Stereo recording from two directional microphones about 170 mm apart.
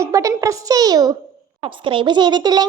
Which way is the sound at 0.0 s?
20° right (ahead or behind).